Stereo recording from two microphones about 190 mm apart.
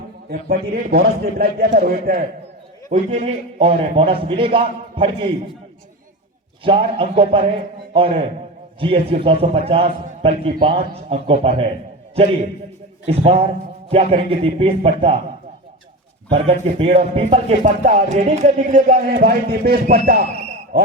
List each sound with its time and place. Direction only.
0.3 s a man's voice: 55° right (ahead or behind)
2.9 s a man's voice: 35° right (ahead or behind)
6.7 s a man's voice: 30° right (ahead or behind)
13.1 s a man's voice: 30° right (ahead or behind)
16.3 s a man's voice: 30° right (ahead or behind); by 20.0 s 55° right (ahead or behind)